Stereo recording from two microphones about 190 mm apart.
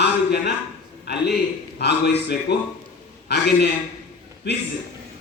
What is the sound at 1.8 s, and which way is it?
A man's voice, 60° left (ahead or behind).